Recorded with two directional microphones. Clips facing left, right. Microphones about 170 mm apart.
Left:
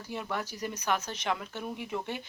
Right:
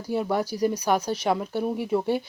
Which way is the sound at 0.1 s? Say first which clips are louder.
Right 10 dB; 40° right (ahead or behind).